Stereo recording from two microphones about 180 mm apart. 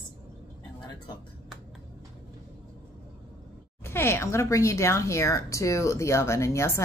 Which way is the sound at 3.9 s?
15° left (ahead or behind).